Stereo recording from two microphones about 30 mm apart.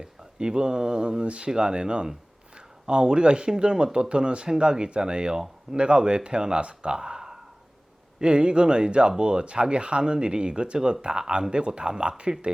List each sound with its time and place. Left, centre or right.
0.0 s speech: right
6.9 s a sound: right
8.2 s speech: right